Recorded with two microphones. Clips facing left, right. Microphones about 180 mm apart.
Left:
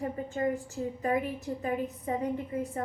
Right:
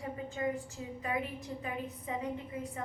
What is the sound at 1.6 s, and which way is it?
Speech, 45° left (ahead or behind).